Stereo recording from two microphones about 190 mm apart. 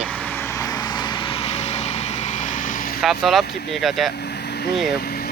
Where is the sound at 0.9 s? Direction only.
25° left (ahead or behind).